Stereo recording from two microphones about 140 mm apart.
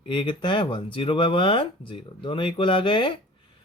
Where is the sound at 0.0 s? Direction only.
35° left (ahead or behind).